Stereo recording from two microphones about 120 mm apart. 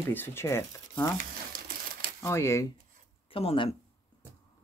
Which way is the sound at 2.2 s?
20° left (ahead or behind).